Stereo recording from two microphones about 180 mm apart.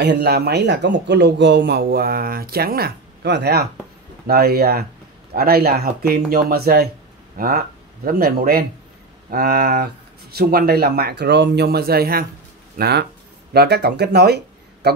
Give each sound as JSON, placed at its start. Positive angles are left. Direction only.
{"t": 0.0, "sound": "a man's voice", "side_deg": -70}